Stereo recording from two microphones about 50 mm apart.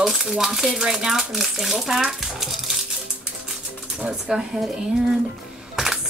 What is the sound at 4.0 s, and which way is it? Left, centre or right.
Speech, right.